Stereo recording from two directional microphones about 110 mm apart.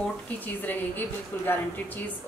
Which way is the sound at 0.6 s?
15° left (ahead or behind).